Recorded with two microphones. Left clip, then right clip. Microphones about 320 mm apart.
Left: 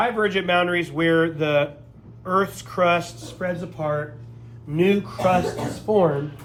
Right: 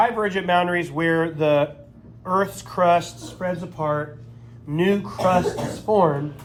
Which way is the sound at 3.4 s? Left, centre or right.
Centre.